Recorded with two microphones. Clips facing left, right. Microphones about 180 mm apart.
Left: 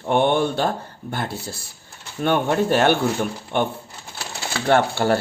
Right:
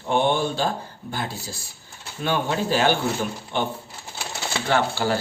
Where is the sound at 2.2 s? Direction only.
60° left (ahead or behind).